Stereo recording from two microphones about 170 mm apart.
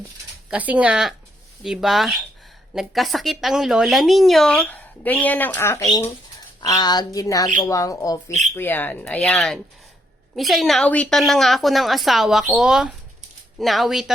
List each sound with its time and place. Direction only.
0.5 s speech: 10° right (ahead or behind)